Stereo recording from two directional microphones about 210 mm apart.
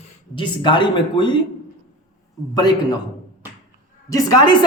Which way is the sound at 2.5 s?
20° left (ahead or behind).